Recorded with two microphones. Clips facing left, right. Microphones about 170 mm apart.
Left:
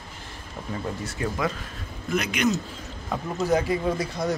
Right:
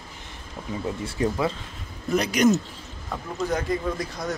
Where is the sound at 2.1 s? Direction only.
35° right (ahead or behind).